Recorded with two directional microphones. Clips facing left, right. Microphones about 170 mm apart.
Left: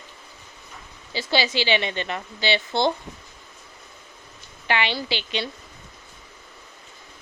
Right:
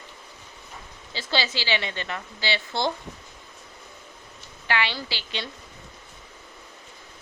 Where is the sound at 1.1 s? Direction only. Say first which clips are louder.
Left 4 dB; 15° left (ahead or behind).